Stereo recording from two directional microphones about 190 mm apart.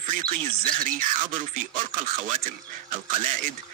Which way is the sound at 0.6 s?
45° right (ahead or behind).